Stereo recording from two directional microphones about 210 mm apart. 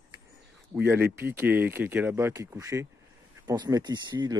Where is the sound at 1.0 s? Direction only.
10° right (ahead or behind).